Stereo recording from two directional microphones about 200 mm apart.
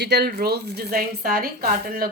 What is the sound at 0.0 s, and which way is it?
A woman's voice, 55° right (ahead or behind).